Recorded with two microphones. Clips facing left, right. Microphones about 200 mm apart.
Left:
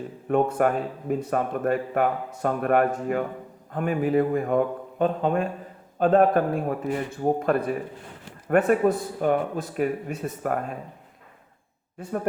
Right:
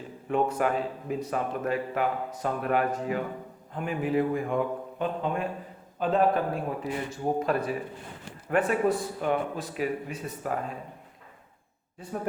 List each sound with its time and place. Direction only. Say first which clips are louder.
0.3 s speech: left 4 dB; 50° left (ahead or behind)